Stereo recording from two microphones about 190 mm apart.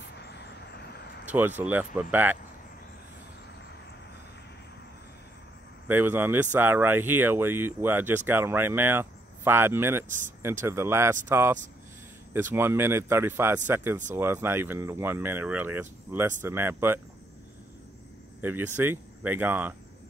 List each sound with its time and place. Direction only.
0.8 s vehicle: 55° left (ahead or behind)
1.2 s speech: 10° right (ahead or behind)
5.9 s speech: 10° right (ahead or behind)
10.0 s speech: 40° right (ahead or behind)
10.6 s speech: 15° right (ahead or behind)
18.4 s speech: 10° right (ahead or behind)